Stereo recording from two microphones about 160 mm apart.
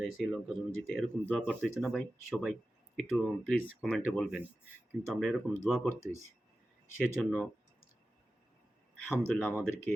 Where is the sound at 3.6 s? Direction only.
10° right (ahead or behind).